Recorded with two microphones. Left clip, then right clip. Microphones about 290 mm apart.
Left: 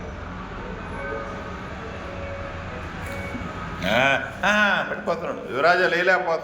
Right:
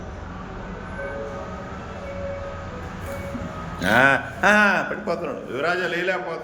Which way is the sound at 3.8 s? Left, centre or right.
Right.